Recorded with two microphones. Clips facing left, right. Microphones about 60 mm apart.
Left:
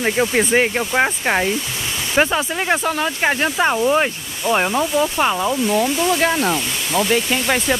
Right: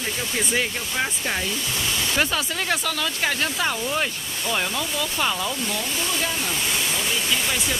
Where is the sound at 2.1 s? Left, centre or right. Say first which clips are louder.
Left 9 dB; left.